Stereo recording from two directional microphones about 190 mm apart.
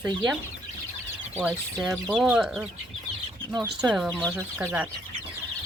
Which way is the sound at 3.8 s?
5° right (ahead or behind).